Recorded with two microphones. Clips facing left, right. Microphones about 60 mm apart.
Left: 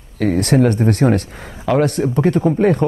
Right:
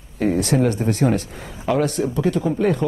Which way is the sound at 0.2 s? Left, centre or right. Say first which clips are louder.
Left 4 dB; left.